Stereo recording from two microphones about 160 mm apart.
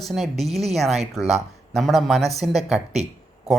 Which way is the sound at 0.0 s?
Centre (ahead or behind).